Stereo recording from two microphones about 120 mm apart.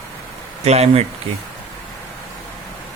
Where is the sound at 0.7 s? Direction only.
60° right (ahead or behind).